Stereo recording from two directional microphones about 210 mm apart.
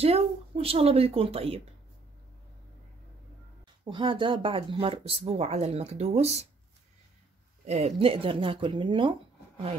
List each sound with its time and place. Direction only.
0.0 s speech: 30° right (ahead or behind)
3.8 s speech: 25° right (ahead or behind)
7.6 s speech: 30° right (ahead or behind)